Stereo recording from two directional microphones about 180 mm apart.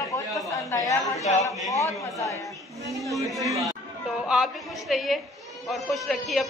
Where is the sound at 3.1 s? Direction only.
Centre (ahead or behind).